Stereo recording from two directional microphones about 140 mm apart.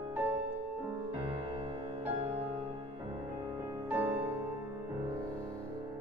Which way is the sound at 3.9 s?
15° right (ahead or behind).